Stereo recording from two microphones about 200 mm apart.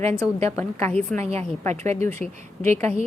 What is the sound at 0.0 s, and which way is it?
Speech, 30° right (ahead or behind).